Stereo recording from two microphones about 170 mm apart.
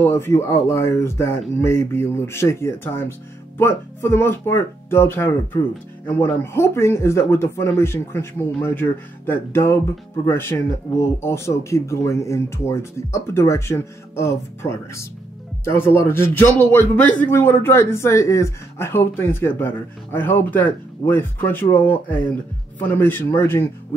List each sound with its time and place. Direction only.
0.0 s a man's voice: 15° left (ahead or behind)